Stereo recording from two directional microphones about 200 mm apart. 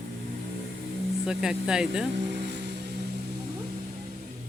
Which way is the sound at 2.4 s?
60° right (ahead or behind).